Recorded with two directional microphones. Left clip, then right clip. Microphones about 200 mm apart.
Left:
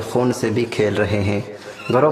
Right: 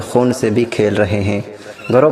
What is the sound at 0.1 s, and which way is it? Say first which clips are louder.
A man's voice: right 5 dB; 15° right (ahead or behind).